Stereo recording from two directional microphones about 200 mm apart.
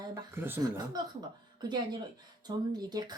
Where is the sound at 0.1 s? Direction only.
10° right (ahead or behind).